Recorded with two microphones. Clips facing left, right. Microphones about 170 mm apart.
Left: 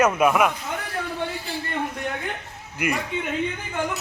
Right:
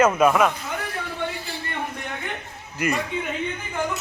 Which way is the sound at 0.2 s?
10° left (ahead or behind).